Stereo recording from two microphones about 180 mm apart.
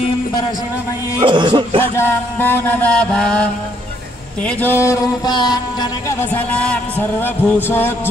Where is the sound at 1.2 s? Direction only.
25° right (ahead or behind).